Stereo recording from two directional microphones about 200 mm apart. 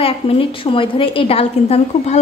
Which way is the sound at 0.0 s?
25° left (ahead or behind).